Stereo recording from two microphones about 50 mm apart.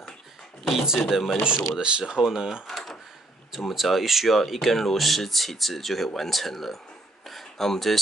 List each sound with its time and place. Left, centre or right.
0.7 s speech: centre
1.4 s speech: centre
2.7 s drawer open or close: centre
3.5 s speech: centre
7.2 s a sound: centre